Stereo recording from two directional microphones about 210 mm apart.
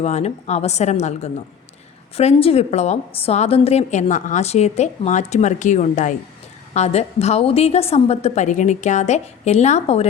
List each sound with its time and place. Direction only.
0.0 s a woman's voice: 30° left (ahead or behind)